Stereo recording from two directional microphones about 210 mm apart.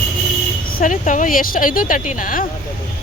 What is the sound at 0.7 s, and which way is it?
Speech, 40° left (ahead or behind).